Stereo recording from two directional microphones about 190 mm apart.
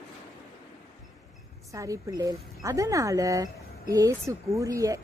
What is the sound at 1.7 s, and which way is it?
A woman's voice, 15° right (ahead or behind).